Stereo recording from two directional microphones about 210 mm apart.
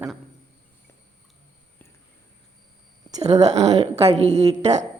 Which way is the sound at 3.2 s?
30° right (ahead or behind).